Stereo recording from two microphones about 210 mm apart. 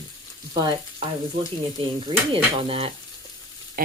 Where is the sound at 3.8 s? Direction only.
40° right (ahead or behind).